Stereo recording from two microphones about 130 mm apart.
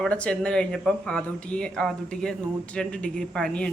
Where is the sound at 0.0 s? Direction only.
10° left (ahead or behind).